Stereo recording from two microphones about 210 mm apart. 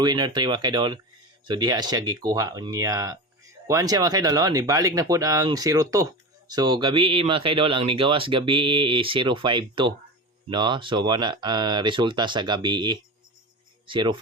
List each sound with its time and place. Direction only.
0.0 s speech: 20° right (ahead or behind)